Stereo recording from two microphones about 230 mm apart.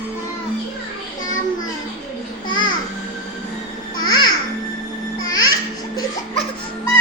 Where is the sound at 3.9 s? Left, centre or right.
Centre.